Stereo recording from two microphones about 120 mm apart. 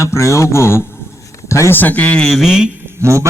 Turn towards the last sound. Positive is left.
turn(degrees=-25)  # may be behind; listen again after turning